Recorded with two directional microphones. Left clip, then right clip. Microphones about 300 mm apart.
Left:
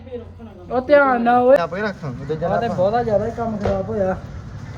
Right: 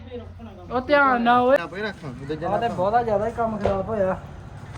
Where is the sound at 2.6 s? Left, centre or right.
Centre.